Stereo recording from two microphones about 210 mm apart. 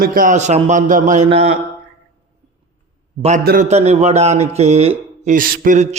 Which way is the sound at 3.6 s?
30° right (ahead or behind).